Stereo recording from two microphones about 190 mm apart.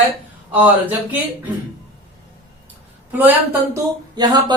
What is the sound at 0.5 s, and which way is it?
Speech, 10° right (ahead or behind).